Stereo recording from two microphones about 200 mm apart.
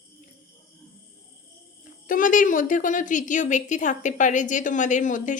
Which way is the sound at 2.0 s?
40° left (ahead or behind).